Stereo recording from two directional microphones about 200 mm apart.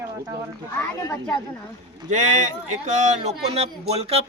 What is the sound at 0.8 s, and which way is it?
Speech, 15° left (ahead or behind).